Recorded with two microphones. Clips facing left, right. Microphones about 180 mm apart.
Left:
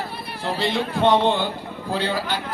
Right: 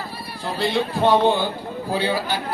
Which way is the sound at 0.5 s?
Centre (ahead or behind).